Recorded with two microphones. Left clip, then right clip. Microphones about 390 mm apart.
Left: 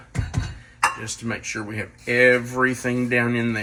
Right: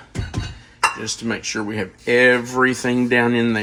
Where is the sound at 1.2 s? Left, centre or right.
Centre.